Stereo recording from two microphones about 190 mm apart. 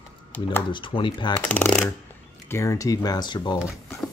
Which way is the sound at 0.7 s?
25° left (ahead or behind).